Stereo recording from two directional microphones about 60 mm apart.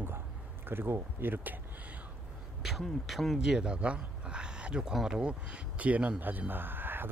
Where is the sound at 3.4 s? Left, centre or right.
Centre.